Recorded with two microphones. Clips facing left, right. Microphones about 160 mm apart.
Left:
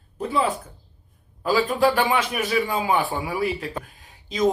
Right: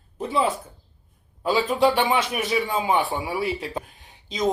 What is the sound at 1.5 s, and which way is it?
A man's voice, 20° right (ahead or behind).